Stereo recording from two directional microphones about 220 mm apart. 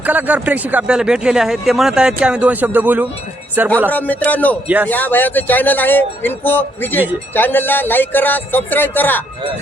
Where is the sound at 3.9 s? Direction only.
5° left (ahead or behind).